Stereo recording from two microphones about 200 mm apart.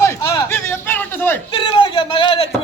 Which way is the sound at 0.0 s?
15° left (ahead or behind).